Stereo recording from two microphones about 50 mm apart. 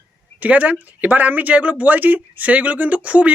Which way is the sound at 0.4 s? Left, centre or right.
Right.